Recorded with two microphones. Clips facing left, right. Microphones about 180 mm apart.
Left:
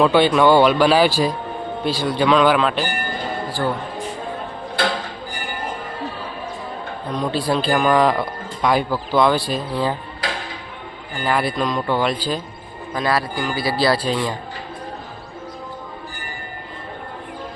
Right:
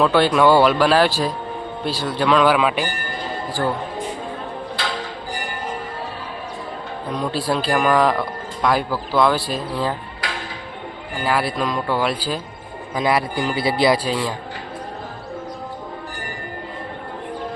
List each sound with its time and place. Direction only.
0.0 s speech: centre (ahead or behind)
7.1 s speech: 5° right (ahead or behind)
11.2 s speech: 5° right (ahead or behind)
12.9 s a man's voice: 20° right (ahead or behind)